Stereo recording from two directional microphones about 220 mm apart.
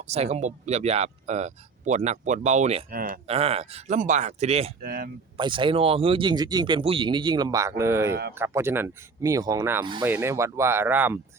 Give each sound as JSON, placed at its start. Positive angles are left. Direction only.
{"t": 0.0, "sound": "speech", "side_deg": -30}
{"t": 3.2, "sound": "speech", "side_deg": -30}
{"t": 4.8, "sound": "speech", "side_deg": -45}
{"t": 5.4, "sound": "speech", "side_deg": -20}